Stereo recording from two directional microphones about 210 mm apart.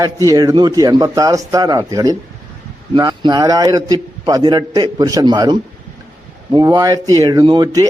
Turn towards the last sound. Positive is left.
turn(degrees=-20)  # may be behind; listen again after turning